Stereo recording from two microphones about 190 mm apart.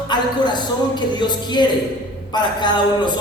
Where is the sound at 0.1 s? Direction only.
25° left (ahead or behind).